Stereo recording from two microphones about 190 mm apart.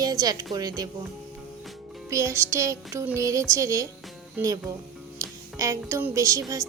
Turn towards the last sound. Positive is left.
turn(degrees=-15)  # may be behind; listen again after turning